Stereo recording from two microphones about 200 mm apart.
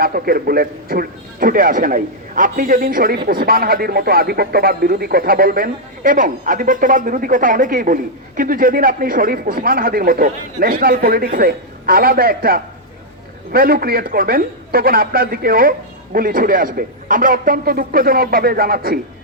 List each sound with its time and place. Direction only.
0.0 s speech: 50° right (ahead or behind)